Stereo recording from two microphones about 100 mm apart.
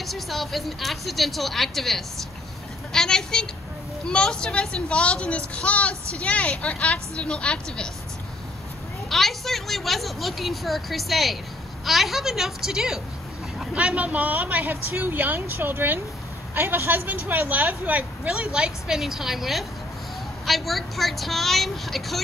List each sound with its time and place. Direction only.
0.0 s a child's voice: centre (ahead or behind)
9.1 s speech: centre (ahead or behind)